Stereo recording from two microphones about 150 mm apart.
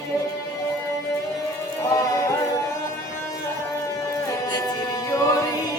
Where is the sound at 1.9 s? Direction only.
20° left (ahead or behind).